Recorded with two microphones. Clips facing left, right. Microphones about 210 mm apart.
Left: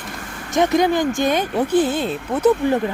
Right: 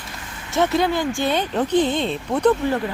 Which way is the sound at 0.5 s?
15° left (ahead or behind).